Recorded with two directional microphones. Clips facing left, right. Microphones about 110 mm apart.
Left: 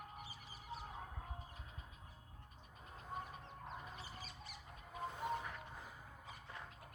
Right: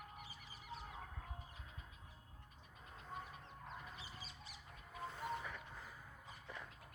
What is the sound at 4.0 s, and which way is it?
Bird, 50° left (ahead or behind).